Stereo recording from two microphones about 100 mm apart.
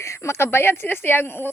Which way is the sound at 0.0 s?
30° left (ahead or behind).